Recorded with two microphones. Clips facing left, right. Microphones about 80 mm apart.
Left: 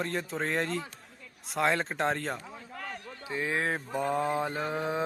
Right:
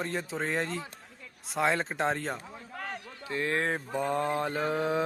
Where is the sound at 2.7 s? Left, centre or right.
Right.